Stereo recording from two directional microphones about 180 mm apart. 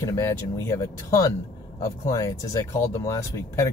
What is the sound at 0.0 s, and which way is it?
Speech, 15° left (ahead or behind).